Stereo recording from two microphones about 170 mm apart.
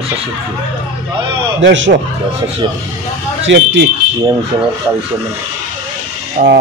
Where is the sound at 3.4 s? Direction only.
90° right.